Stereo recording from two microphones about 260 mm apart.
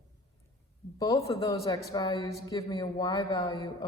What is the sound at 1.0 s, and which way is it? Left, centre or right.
A woman's voice, centre.